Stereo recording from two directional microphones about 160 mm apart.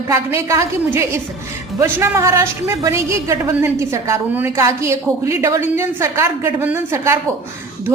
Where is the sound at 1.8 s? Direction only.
20° right (ahead or behind).